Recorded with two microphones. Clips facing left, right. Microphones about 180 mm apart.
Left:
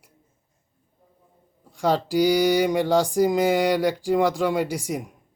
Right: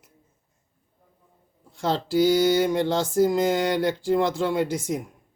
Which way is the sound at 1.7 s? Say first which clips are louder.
Left 3 dB; 15° left (ahead or behind).